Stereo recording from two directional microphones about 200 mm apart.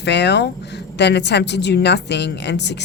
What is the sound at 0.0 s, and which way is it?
A woman's voice, 60° left (ahead or behind).